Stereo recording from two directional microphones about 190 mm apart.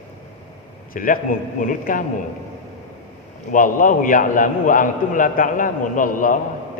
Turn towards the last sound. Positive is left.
turn(degrees=45)  # may be behind; listen again after turning